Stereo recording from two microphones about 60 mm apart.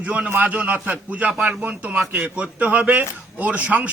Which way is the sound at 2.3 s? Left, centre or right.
Centre.